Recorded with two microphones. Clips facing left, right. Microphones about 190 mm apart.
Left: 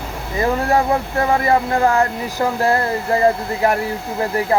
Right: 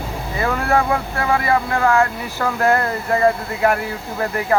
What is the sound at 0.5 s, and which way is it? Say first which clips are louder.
Speech: even; 35° left (ahead or behind).